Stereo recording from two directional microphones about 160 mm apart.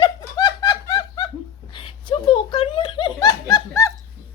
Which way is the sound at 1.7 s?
30° left (ahead or behind).